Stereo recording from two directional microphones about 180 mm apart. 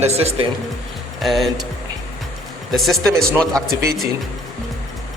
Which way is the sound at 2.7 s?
Centre (ahead or behind).